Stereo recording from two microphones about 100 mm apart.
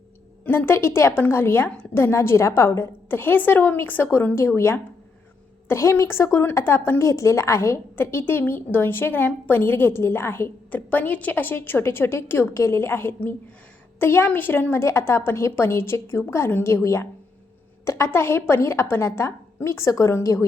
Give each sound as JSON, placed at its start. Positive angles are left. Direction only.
{"t": 0.4, "sound": "a woman's voice", "side_deg": 20}